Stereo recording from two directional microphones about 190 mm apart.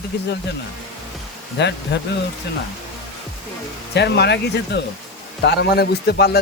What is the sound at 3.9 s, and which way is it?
A man's voice, 60° left (ahead or behind).